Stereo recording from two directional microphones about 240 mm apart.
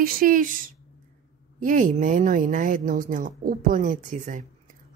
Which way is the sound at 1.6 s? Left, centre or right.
Right.